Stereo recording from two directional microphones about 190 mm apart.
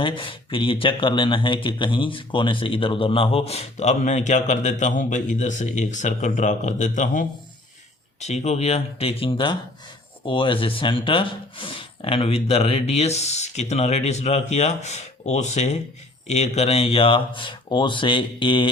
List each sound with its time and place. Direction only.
0.0 s speech: 25° left (ahead or behind)